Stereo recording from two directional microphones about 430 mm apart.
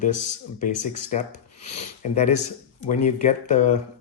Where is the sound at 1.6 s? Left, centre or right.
Centre.